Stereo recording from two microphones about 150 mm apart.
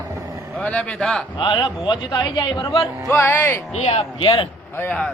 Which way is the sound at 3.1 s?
20° left (ahead or behind).